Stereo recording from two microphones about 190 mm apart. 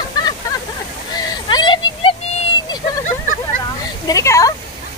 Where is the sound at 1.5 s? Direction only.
25° left (ahead or behind).